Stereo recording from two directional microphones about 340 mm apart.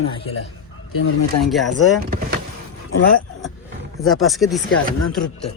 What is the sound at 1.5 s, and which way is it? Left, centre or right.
Speech, centre.